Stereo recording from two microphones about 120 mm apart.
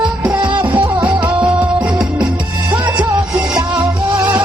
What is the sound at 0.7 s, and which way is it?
Music, 40° right (ahead or behind).